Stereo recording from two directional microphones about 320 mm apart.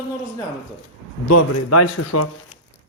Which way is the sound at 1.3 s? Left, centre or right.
Left.